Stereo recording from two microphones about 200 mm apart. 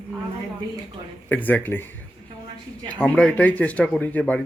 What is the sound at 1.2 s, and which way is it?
Speech, 10° left (ahead or behind).